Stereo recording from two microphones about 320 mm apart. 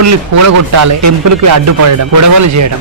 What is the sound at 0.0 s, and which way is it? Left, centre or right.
Speech, right.